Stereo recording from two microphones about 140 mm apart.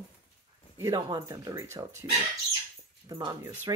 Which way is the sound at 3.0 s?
30° right (ahead or behind).